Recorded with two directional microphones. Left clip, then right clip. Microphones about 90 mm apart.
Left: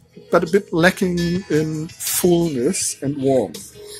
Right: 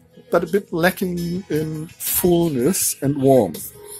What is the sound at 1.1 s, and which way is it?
Speech, 50° left (ahead or behind).